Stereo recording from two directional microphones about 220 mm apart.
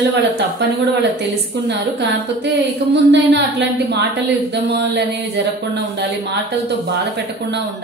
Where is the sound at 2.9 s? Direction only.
50° right (ahead or behind).